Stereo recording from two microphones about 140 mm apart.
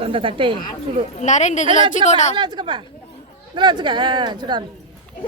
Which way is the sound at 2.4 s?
35° right (ahead or behind).